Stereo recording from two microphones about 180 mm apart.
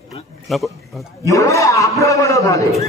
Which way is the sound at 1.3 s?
15° left (ahead or behind).